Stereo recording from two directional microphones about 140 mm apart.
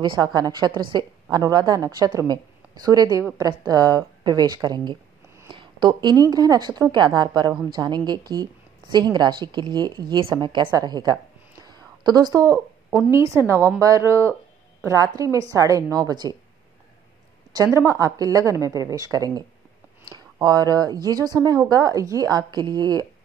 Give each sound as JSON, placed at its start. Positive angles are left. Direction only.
{"t": 0.0, "sound": "a woman's voice", "side_deg": -30}
{"t": 11.6, "sound": "a sound", "side_deg": -30}
{"t": 13.1, "sound": "a woman's voice", "side_deg": -20}
{"t": 17.6, "sound": "a woman's voice", "side_deg": -20}